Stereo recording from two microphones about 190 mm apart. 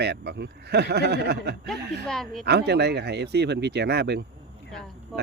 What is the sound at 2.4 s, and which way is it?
Speech, 60° right (ahead or behind).